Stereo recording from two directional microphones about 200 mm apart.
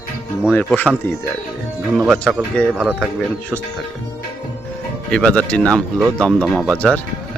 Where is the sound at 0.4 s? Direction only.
5° left (ahead or behind).